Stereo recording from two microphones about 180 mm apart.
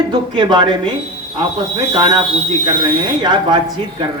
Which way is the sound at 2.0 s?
25° right (ahead or behind).